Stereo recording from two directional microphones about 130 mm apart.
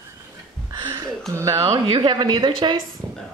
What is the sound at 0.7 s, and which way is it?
Speech, 25° right (ahead or behind).